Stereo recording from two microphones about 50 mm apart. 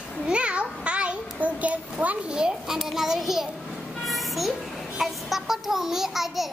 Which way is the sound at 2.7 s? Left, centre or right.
Centre.